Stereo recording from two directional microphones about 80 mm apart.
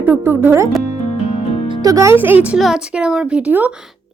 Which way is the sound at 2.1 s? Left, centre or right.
Right.